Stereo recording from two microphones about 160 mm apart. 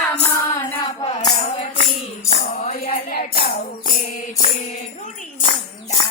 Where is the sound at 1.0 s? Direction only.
25° left (ahead or behind).